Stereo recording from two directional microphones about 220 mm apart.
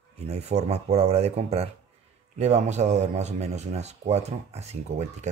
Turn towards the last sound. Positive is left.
turn(degrees=-30)  # may be behind; listen again after turning